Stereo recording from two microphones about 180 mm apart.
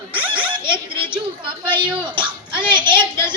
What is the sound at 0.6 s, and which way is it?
Speech, 25° right (ahead or behind).